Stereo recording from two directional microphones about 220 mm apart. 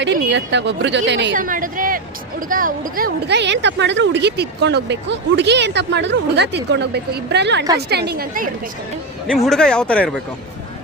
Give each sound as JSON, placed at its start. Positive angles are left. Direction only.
{"t": 0.0, "sound": "speech", "side_deg": -55}
{"t": 1.4, "sound": "a woman's voice", "side_deg": -40}
{"t": 9.2, "sound": "speech", "side_deg": 0}